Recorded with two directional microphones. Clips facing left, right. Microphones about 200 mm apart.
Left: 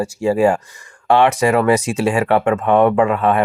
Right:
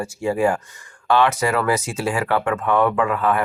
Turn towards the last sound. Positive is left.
turn(degrees=25)  # may be behind; listen again after turning